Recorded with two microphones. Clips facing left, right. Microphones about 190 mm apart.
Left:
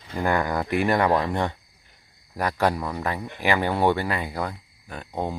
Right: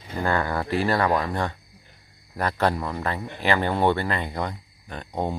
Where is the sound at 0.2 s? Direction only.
10° left (ahead or behind).